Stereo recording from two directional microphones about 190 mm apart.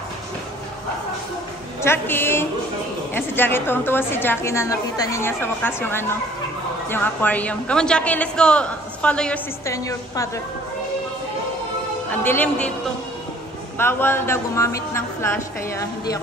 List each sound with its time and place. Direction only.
1.8 s a woman's voice: 10° left (ahead or behind)
9.7 s a woman's voice: 15° left (ahead or behind)
12.1 s a woman's voice: 10° left (ahead or behind)
13.7 s a woman's voice: 10° left (ahead or behind)